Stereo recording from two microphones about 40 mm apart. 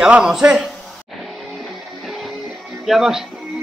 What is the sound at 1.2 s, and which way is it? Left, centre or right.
Music, centre.